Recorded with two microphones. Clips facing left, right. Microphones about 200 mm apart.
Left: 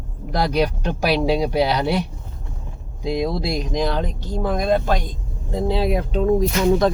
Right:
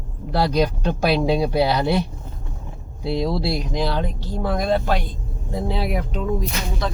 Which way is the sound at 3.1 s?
15° left (ahead or behind).